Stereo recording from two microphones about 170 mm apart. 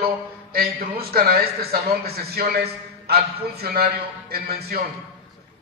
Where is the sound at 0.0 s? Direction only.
60° right (ahead or behind).